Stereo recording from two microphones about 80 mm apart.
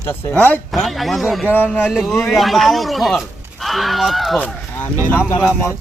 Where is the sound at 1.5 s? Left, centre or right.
Left.